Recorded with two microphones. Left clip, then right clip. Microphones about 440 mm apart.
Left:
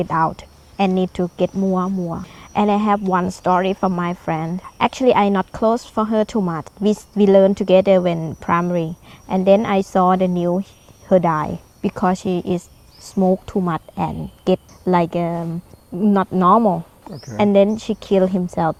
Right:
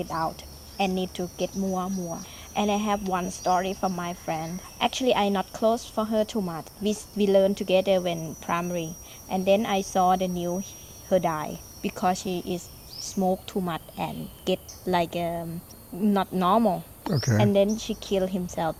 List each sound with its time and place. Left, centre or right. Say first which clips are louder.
0.0 s speech: left 10 dB; left
9.3 s speech: left 8 dB; left
17.0 s speech: right 7 dB; right
17.3 s speech: left 8 dB; left